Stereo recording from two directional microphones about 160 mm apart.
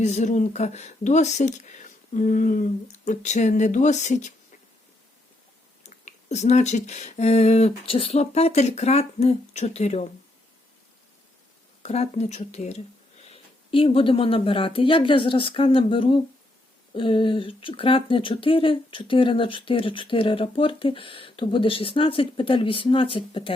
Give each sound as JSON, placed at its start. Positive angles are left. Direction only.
{"t": 0.0, "sound": "speech", "side_deg": 45}
{"t": 5.8, "sound": "speech", "side_deg": 50}
{"t": 11.8, "sound": "speech", "side_deg": 45}